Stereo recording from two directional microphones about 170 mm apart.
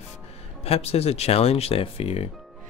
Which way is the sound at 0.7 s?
35° left (ahead or behind).